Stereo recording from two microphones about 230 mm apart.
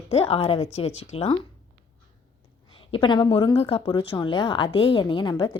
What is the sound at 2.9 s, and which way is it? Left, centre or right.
A woman's voice, left.